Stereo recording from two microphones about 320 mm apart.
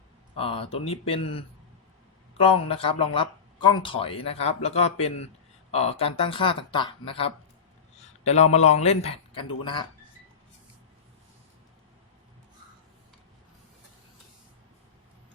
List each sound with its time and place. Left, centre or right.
0.3 s a man's voice: centre